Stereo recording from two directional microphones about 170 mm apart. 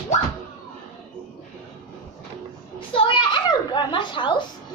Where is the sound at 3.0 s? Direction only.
30° left (ahead or behind).